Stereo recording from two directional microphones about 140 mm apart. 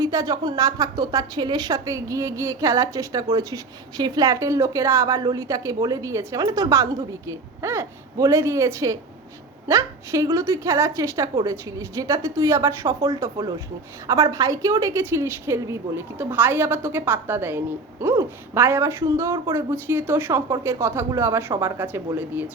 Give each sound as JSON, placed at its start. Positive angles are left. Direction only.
{"t": 0.0, "sound": "a woman's voice", "side_deg": -25}